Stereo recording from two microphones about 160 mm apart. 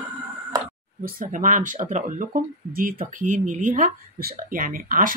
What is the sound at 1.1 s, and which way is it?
Speech, 55° right (ahead or behind).